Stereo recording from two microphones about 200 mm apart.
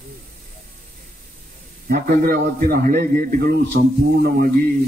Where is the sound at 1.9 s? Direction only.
45° right (ahead or behind).